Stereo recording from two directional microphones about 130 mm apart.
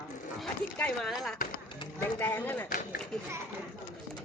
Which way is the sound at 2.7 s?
90° left.